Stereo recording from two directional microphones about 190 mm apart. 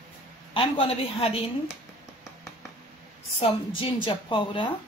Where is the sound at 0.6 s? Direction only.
30° left (ahead or behind).